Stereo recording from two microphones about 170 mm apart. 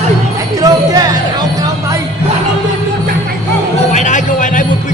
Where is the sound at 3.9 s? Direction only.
45° left (ahead or behind).